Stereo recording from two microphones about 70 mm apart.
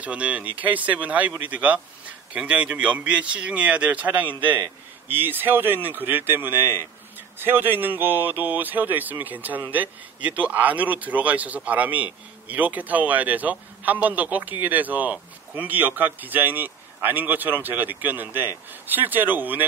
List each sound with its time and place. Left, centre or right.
0.0 s speech: centre